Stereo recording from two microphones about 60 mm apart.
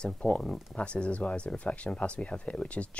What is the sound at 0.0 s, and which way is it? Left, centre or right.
Speech, centre.